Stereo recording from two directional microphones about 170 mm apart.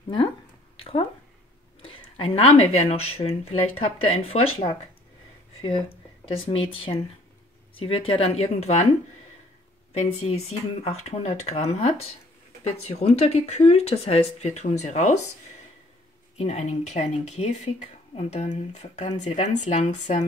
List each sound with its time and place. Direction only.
0.7 s a sound: 35° left (ahead or behind)
1.8 s speech: 30° left (ahead or behind)
6.2 s speech: 35° left (ahead or behind)
9.9 s speech: 40° left (ahead or behind)
16.3 s speech: 40° left (ahead or behind)